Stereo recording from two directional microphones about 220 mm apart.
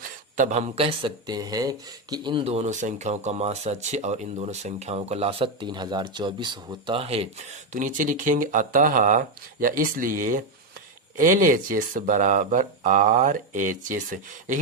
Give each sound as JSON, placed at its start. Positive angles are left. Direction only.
{"t": 0.0, "sound": "speech", "side_deg": -35}